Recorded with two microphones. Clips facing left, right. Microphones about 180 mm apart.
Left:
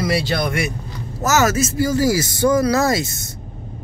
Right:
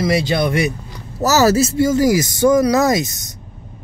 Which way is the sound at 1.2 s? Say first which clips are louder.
Right 4 dB; 35° right (ahead or behind).